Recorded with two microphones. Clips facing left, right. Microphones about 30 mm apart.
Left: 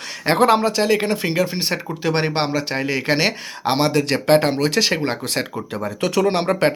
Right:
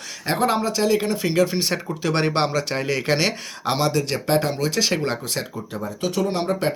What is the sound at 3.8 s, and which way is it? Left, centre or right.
Speech, left.